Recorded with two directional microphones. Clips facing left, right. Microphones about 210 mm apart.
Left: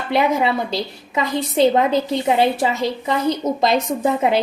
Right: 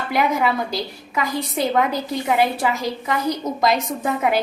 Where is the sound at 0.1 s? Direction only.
25° left (ahead or behind).